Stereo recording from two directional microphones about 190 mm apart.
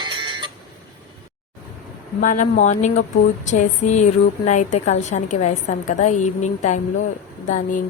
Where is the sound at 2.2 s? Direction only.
45° left (ahead or behind).